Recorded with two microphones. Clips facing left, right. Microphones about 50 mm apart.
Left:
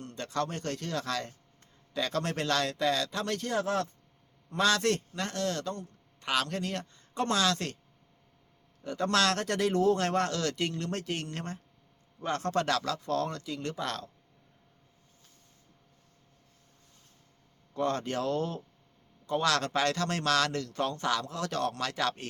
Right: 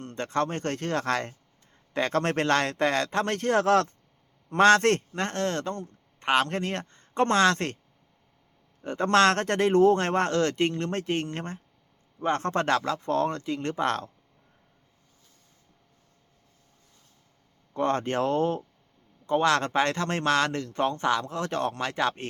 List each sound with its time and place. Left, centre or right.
0.0 s a man's voice: right
3.6 s speech: right
4.4 s a man's voice: right
8.8 s a man's voice: right
17.7 s a man's voice: right